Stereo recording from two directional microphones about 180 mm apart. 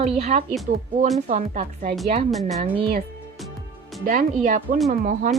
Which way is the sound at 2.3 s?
Centre (ahead or behind).